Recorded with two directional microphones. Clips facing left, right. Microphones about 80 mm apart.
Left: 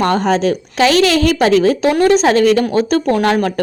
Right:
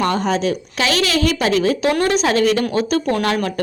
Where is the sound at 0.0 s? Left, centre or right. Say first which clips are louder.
Left 4 dB; left.